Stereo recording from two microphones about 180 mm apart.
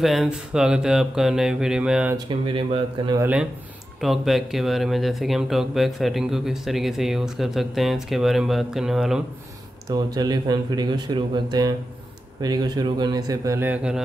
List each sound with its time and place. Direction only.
0.0 s speech: centre (ahead or behind)
2.1 s speech: 25° right (ahead or behind)
3.2 s speech: 10° right (ahead or behind)
9.8 s speech: 20° right (ahead or behind)